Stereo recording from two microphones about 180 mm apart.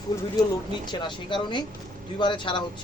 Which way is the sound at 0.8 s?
25° left (ahead or behind).